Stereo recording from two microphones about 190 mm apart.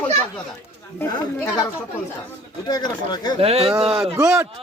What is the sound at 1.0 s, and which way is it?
Speech, 15° left (ahead or behind).